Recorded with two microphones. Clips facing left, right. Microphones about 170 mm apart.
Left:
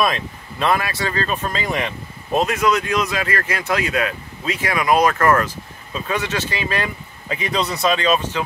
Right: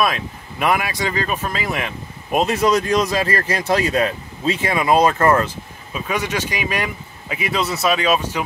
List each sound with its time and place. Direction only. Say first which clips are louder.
0.0 s speech: even; 5° right (ahead or behind)
0.7 s speech: right 1 dB; 15° right (ahead or behind)
2.3 s speech: right 1 dB; 30° right (ahead or behind)
5.9 s speech: even; 10° right (ahead or behind)